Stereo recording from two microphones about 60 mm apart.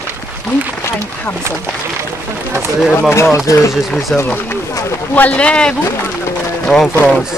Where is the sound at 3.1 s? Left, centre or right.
Left.